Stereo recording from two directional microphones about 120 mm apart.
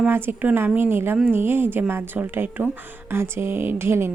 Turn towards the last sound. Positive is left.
turn(degrees=-20)  # may be behind; listen again after turning